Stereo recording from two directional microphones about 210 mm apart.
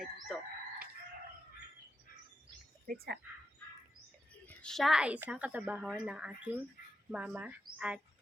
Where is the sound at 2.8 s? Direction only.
45° right (ahead or behind).